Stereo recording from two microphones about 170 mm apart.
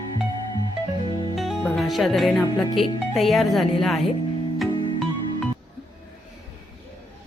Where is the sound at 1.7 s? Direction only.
Centre (ahead or behind).